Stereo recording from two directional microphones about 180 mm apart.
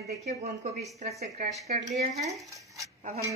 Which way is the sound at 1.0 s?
40° right (ahead or behind).